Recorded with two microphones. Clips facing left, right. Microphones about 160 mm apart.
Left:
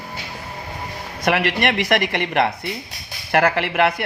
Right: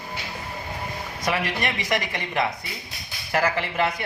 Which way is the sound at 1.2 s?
70° left (ahead or behind).